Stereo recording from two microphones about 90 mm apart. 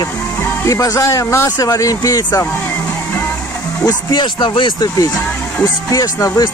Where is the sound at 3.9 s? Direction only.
60° left (ahead or behind).